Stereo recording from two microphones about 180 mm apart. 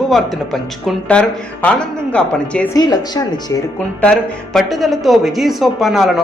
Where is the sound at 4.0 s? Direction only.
5° left (ahead or behind).